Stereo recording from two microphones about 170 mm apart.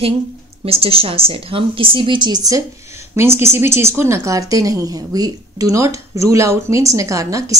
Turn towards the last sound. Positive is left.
turn(degrees=-20)  # may be behind; listen again after turning